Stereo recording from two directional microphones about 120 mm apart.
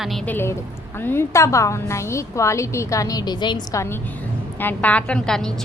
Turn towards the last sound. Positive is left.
turn(degrees=5)  # may be behind; listen again after turning